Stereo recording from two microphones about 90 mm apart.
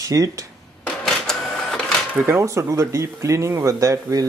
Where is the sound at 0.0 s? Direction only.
40° right (ahead or behind).